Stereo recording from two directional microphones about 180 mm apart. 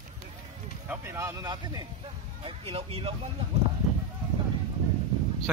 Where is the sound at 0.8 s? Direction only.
10° right (ahead or behind); by 3.1 s 30° right (ahead or behind).